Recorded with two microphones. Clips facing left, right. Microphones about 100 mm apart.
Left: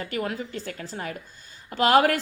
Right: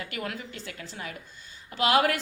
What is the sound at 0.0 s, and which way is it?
A woman's voice, 35° left (ahead or behind).